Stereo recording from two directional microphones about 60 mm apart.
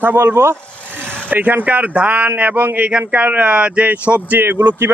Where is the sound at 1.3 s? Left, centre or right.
Right.